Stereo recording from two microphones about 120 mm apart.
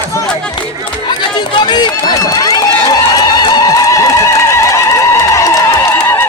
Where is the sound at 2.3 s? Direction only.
30° left (ahead or behind).